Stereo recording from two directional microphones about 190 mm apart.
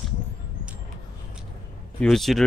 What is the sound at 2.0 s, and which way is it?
Speech, centre (ahead or behind).